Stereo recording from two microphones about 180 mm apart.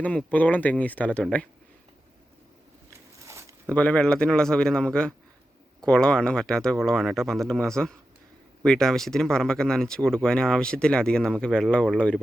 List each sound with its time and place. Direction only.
0.0 s speech: 5° left (ahead or behind)
3.2 s a sound: 15° right (ahead or behind)
3.7 s speech: 5° left (ahead or behind)